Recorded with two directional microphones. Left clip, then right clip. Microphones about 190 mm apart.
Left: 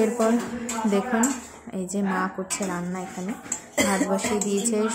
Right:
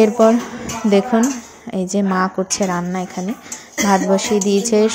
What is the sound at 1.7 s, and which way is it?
A woman's voice, 35° right (ahead or behind).